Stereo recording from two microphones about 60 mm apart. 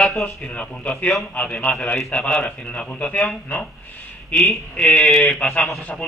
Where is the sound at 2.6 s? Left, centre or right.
Centre.